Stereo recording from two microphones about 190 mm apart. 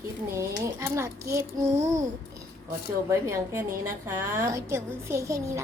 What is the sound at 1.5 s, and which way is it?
Child singing, 40° right (ahead or behind).